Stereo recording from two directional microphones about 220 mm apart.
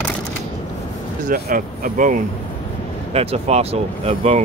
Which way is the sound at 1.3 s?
40° right (ahead or behind).